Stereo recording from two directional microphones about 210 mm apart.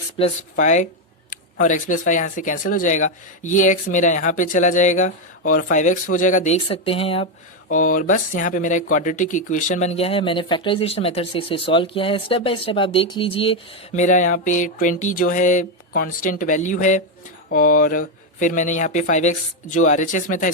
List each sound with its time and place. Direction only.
0.2 s speech: 30° left (ahead or behind)
7.7 s speech: 40° left (ahead or behind)